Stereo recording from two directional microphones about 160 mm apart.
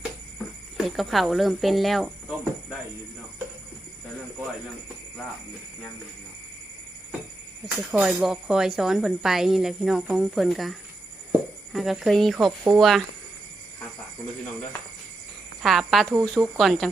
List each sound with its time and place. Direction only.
0.8 s speech: centre (ahead or behind)
7.9 s speech: centre (ahead or behind)
15.6 s speech: centre (ahead or behind)